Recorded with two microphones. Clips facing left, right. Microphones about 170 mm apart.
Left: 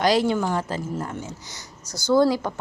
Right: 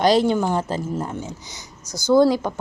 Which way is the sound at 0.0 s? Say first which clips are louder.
Right 3 dB; 25° right (ahead or behind).